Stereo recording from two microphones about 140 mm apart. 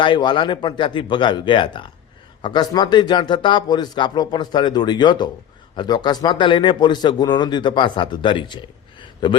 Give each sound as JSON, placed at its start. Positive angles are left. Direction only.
{"t": 0.0, "sound": "a man's voice", "side_deg": 35}